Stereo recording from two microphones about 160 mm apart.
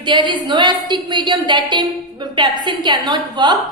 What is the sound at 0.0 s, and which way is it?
A woman's voice, 30° right (ahead or behind).